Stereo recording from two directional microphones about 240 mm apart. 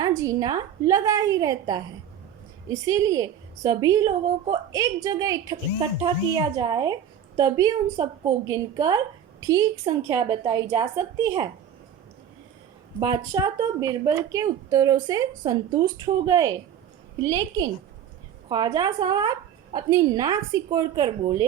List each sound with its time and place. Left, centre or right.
0.2 s a woman's voice: centre
13.0 s a woman's voice: centre